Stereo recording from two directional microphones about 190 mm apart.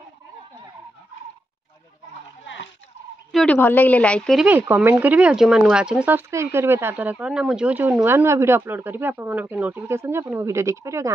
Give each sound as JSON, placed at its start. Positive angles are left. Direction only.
{"t": 2.4, "sound": "goat", "side_deg": 70}
{"t": 3.3, "sound": "a woman's voice", "side_deg": 5}
{"t": 4.5, "sound": "speech", "side_deg": -10}